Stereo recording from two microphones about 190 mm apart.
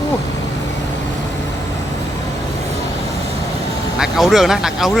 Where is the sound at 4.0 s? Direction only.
Centre (ahead or behind).